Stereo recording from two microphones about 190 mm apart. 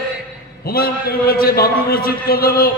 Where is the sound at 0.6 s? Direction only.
50° left (ahead or behind).